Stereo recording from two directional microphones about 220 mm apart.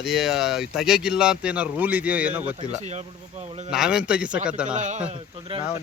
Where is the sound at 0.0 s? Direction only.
Centre (ahead or behind).